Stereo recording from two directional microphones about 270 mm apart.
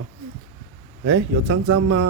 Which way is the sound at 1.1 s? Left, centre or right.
Right.